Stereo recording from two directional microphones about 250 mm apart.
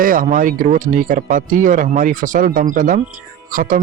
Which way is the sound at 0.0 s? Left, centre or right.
Right.